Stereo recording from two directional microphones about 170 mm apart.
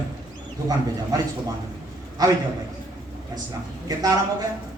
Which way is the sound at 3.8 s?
20° right (ahead or behind).